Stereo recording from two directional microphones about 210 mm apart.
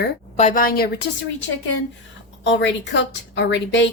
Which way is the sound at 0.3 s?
35° left (ahead or behind).